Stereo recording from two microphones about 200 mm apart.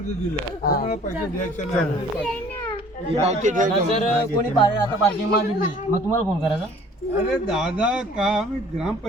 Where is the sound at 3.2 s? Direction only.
35° right (ahead or behind).